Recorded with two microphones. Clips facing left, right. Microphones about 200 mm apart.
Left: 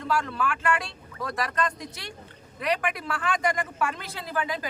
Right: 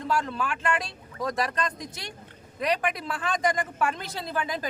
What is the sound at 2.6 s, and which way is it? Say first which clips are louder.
Speech: right 1 dB; 35° right (ahead or behind).